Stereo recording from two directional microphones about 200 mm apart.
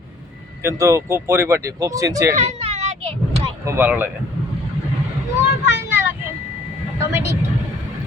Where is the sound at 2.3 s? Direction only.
30° right (ahead or behind).